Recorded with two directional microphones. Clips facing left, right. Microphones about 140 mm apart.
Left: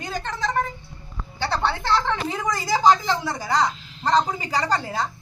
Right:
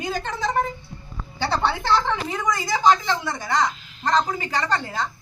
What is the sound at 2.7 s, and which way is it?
A woman's voice, 35° left (ahead or behind).